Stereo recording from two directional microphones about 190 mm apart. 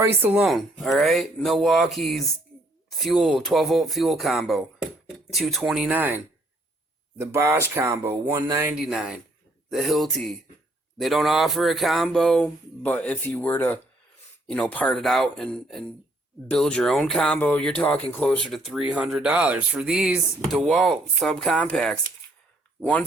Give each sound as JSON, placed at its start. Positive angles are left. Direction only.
{"t": 0.2, "sound": "speech", "side_deg": -10}